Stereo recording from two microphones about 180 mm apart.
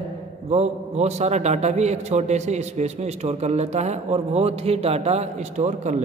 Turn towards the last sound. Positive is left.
turn(degrees=-40)  # may be behind; listen again after turning